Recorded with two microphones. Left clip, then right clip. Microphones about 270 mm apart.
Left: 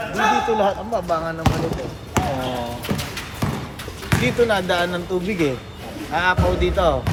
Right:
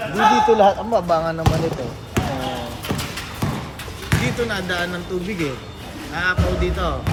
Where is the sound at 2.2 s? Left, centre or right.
Centre.